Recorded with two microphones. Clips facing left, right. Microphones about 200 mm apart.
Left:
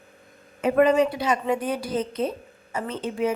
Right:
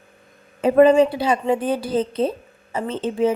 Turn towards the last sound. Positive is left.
turn(degrees=-30)  # may be behind; listen again after turning